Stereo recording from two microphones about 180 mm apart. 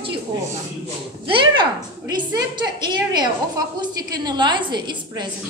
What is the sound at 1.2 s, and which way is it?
A woman's voice, 25° right (ahead or behind).